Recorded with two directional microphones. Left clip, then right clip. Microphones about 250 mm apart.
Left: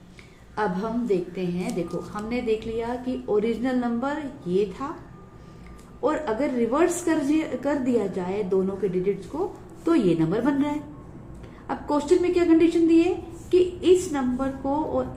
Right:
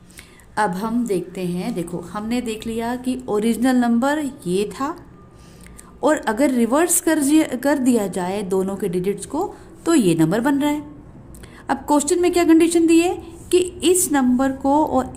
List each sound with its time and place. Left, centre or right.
0.5 s a woman's voice: right
6.0 s a woman's voice: right